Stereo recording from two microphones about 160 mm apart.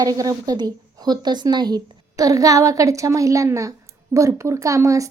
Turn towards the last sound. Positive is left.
turn(degrees=-20)  # may be behind; listen again after turning